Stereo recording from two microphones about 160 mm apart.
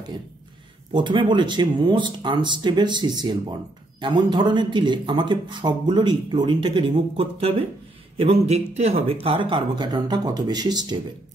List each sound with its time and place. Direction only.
0.9 s speech: 30° right (ahead or behind)